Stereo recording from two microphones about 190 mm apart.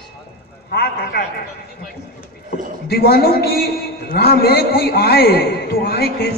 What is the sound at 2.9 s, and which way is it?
A man's voice, 55° left (ahead or behind).